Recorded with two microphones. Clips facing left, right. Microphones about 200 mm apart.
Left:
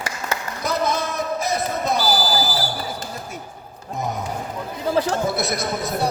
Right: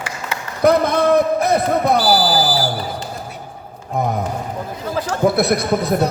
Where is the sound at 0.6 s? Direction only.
60° right (ahead or behind).